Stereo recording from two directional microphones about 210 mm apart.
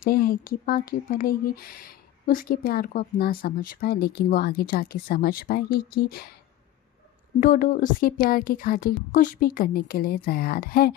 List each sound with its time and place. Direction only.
0.0 s speech: 45° left (ahead or behind)
7.3 s speech: 40° left (ahead or behind)